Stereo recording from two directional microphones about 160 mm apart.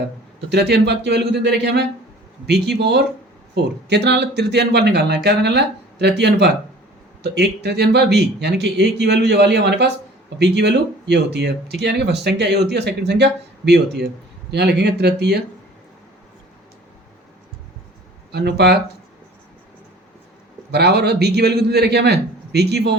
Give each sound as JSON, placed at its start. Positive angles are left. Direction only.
{"t": 0.5, "sound": "speech", "side_deg": -90}
{"t": 18.3, "sound": "speech", "side_deg": -90}
{"t": 20.7, "sound": "speech", "side_deg": -90}